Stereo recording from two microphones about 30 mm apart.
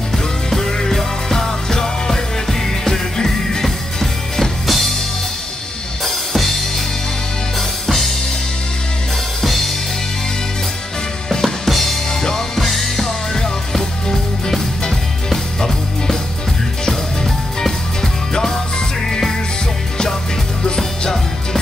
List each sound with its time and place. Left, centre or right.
0.1 s music: centre
4.6 s music: centre
6.0 s drum kit: centre
7.8 s drum kit: centre
9.4 s drum kit: centre
11.4 s drum kit: centre
12.5 s music: centre
13.0 s music: centre
15.2 s music: centre